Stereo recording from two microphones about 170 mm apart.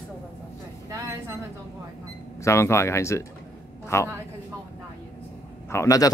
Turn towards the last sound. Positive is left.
turn(degrees=20)  # may be behind; listen again after turning